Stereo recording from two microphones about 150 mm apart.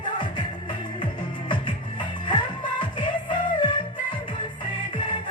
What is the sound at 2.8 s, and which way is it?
Music, 30° left (ahead or behind).